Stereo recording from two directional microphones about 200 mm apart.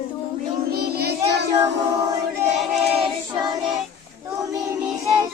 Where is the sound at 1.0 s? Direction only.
55° right (ahead or behind).